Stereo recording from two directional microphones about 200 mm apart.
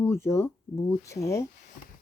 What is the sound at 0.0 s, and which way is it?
Speech, 15° left (ahead or behind).